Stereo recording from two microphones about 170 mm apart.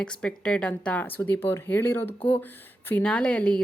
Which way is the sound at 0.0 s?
5° left (ahead or behind).